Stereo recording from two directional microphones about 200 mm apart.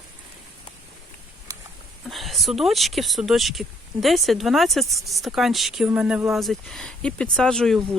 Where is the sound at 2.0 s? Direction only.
Centre (ahead or behind).